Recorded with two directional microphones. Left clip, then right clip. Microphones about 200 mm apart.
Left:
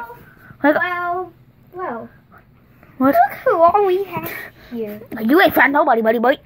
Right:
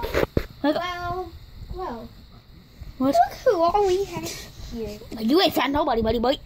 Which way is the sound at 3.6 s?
40° right (ahead or behind).